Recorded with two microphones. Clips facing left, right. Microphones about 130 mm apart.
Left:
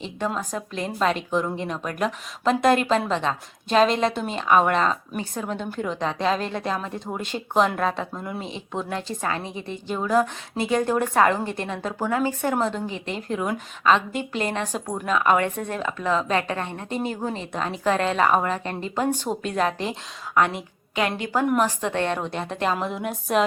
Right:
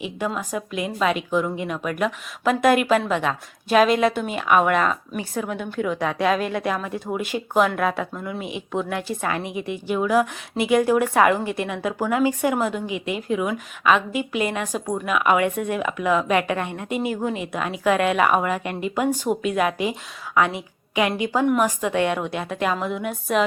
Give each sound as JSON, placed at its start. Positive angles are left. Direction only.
{"t": 0.3, "sound": "a woman's voice", "side_deg": -5}
{"t": 5.6, "sound": "a woman's voice", "side_deg": 5}
{"t": 5.9, "sound": "a woman's voice", "side_deg": 20}
{"t": 6.1, "sound": "speech", "side_deg": -10}
{"t": 8.7, "sound": "a woman's voice", "side_deg": 20}
{"t": 9.0, "sound": "a woman's voice", "side_deg": -10}